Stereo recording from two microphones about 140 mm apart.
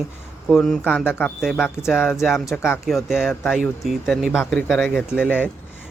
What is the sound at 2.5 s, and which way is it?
Speech, 15° left (ahead or behind).